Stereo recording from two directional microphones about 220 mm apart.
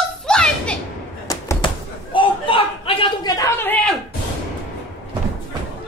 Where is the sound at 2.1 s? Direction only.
25° left (ahead or behind).